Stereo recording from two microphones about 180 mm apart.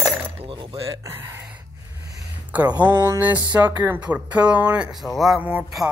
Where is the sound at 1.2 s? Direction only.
15° right (ahead or behind).